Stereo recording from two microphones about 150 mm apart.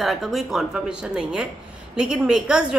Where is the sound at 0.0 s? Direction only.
Centre (ahead or behind).